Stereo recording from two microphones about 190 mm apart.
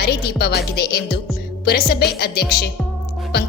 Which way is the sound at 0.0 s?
60° left (ahead or behind).